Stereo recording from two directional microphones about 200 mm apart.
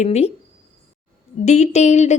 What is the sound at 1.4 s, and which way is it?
Speech, 35° left (ahead or behind).